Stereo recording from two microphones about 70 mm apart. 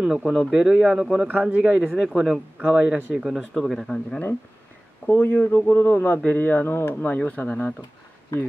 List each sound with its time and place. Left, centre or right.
0.0 s speech: centre
1.2 s a man's voice: right
3.5 s speech: centre
5.0 s a man's voice: left
7.0 s a man's voice: left